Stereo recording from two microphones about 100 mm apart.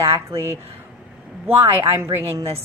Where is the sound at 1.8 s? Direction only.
30° right (ahead or behind).